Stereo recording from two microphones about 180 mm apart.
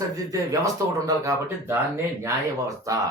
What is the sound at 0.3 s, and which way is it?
Speech, 20° right (ahead or behind).